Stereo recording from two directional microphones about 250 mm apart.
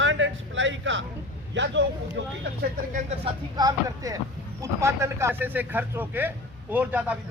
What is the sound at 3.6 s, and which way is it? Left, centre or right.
Speech, centre.